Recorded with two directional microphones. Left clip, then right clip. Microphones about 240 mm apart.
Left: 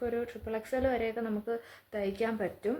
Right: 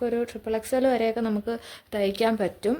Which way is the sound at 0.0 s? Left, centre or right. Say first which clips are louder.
Right 7 dB; right.